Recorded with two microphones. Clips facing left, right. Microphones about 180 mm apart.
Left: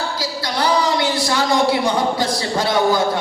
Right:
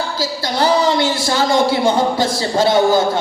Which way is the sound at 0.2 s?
25° right (ahead or behind).